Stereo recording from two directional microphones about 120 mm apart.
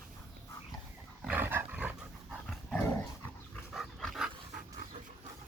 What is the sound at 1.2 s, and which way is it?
Dog, 15° right (ahead or behind).